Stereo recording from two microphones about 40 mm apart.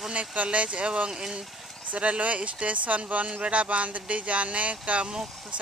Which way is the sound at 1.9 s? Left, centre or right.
Right.